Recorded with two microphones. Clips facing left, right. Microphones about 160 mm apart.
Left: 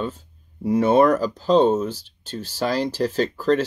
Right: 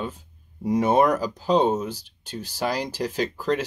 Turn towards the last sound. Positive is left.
turn(degrees=-15)  # may be behind; listen again after turning